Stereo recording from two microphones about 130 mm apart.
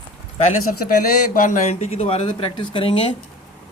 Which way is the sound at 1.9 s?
50° left (ahead or behind).